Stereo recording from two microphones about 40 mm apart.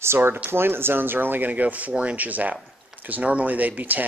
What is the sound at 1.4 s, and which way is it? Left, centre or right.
Speech, right.